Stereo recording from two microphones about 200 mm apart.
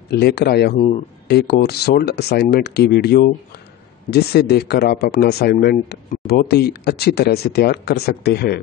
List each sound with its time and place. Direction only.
0.1 s speech: 55° left (ahead or behind)
0.7 s speech: 35° left (ahead or behind)
1.3 s speech: 50° left (ahead or behind)